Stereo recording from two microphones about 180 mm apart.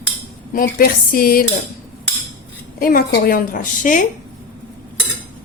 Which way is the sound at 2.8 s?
55° left (ahead or behind).